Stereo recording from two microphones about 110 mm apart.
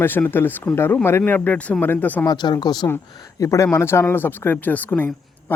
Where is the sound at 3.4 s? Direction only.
25° left (ahead or behind).